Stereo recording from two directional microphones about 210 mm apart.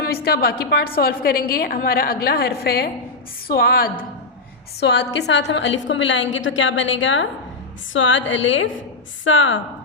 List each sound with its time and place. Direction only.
0.1 s a woman's voice: 45° left (ahead or behind); by 9.6 s 65° left (ahead or behind)